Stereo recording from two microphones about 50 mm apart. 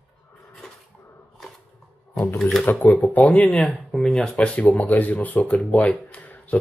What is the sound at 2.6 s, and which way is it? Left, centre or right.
Speech, left.